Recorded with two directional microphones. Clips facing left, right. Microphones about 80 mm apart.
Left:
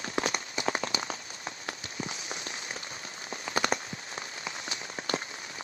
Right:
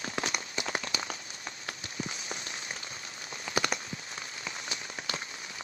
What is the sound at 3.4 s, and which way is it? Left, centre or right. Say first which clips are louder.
Rain on surface: left 2 dB; left.